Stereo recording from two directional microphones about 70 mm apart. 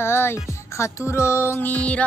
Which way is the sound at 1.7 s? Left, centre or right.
Centre.